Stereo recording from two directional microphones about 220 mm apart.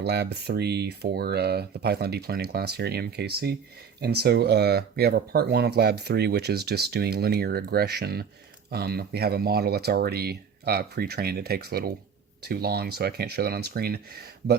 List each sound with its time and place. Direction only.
0.0 s speech: 50° right (ahead or behind)